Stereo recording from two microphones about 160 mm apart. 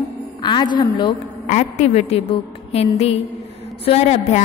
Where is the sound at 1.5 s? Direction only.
45° left (ahead or behind).